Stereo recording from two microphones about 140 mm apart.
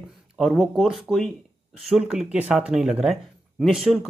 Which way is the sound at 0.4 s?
Centre (ahead or behind).